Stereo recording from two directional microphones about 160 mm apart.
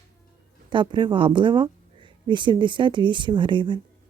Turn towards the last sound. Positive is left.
turn(degrees=-30)  # may be behind; listen again after turning